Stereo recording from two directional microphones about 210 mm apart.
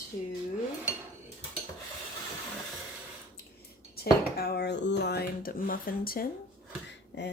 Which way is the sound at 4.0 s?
45° left (ahead or behind).